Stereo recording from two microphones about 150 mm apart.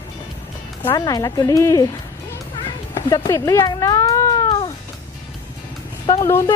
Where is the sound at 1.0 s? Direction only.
25° left (ahead or behind).